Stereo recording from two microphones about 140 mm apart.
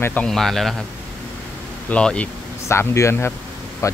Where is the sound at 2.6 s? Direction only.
20° left (ahead or behind).